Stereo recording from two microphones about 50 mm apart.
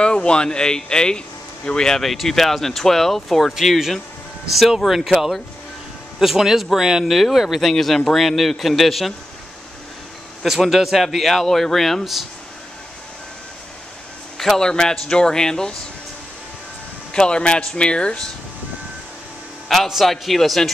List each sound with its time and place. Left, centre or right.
0.0 s a man's voice: centre
10.4 s speech: centre
14.4 s a man's voice: centre
17.1 s speech: centre
19.9 s speech: centre